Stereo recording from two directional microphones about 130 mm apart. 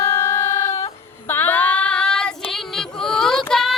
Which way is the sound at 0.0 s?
25° left (ahead or behind).